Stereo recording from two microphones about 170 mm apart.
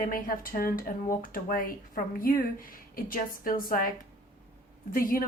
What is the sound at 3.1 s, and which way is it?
Speech, 55° left (ahead or behind).